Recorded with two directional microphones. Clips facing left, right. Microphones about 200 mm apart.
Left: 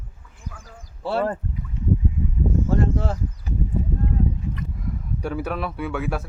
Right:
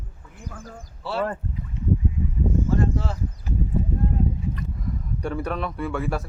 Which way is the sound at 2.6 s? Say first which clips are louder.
Left 1 dB; 55° left (ahead or behind).